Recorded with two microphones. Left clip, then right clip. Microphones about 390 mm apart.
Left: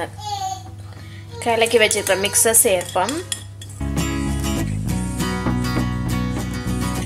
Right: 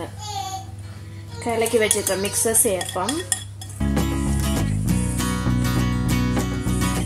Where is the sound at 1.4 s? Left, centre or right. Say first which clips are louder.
Left 4 dB; left.